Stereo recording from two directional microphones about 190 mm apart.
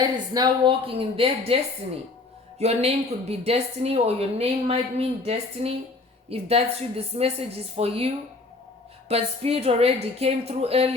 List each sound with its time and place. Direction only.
0.0 s a woman's voice: 20° right (ahead or behind)
2.6 s a woman's voice: 35° right (ahead or behind)